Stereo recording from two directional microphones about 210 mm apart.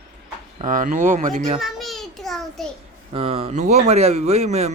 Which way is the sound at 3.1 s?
25° right (ahead or behind).